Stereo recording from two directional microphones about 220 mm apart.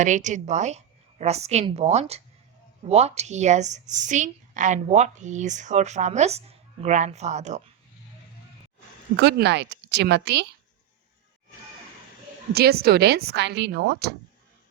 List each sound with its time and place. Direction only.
0.0 s a woman's voice: 35° right (ahead or behind)
9.1 s a woman's voice: 50° right (ahead or behind)
12.5 s a woman's voice: 45° right (ahead or behind)